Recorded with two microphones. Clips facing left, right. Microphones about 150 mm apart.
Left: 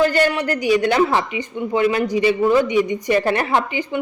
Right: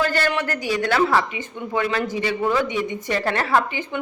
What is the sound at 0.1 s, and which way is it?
Speech, 15° left (ahead or behind).